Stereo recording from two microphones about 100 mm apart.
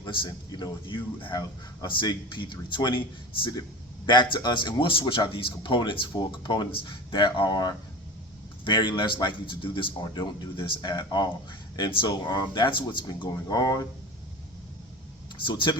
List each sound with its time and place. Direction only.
0.0 s a sound: 55° left (ahead or behind)
0.3 s speech: 45° left (ahead or behind)
4.0 s speech: 50° left (ahead or behind)
13.3 s speech: 40° left (ahead or behind)
15.4 s speech: 55° left (ahead or behind)